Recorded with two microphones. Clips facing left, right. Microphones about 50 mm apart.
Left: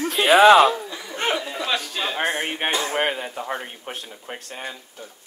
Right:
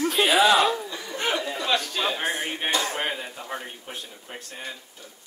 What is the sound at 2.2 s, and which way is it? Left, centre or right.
Speech, left.